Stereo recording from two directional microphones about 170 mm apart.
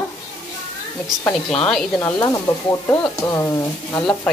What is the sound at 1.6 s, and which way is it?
A woman's voice, 10° left (ahead or behind).